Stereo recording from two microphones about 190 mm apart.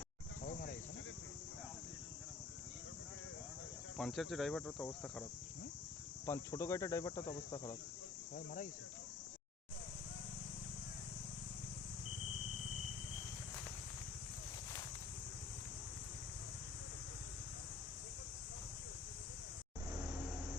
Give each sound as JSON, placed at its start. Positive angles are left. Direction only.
{"t": 3.9, "sound": "speech", "side_deg": 0}
{"t": 6.2, "sound": "speech", "side_deg": 15}